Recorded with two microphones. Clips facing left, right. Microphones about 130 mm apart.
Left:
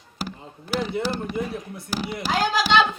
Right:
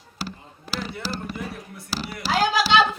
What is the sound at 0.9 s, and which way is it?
Speech, 20° left (ahead or behind).